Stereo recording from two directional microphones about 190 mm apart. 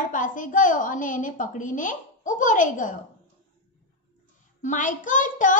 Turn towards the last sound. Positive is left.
turn(degrees=40)  # may be behind; listen again after turning